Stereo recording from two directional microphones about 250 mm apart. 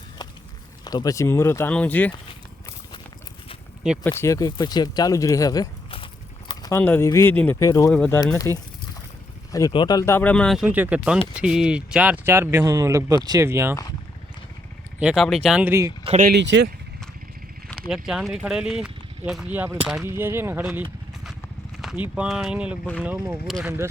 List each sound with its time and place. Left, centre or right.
0.9 s speech: centre
3.9 s speech: centre
4.2 s speech: centre
7.9 s speech: centre
8.5 s speech: centre
14.9 s speech: centre
16.0 s speech: right
17.7 s speech: centre